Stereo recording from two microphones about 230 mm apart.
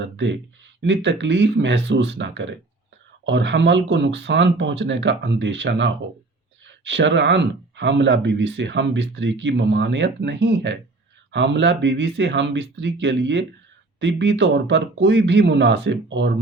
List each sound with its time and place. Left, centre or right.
0.0 s speech: right